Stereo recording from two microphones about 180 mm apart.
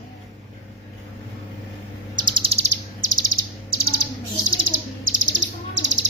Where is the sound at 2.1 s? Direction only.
25° right (ahead or behind).